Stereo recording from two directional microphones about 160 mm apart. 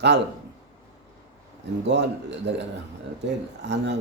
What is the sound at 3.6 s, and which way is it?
Speech, 90° right.